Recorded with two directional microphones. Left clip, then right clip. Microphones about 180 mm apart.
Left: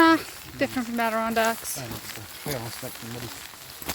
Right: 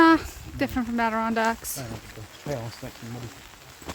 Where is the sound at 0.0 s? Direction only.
20° right (ahead or behind).